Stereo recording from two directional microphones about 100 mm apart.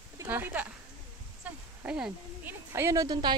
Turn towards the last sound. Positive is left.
turn(degrees=-45)  # may be behind; listen again after turning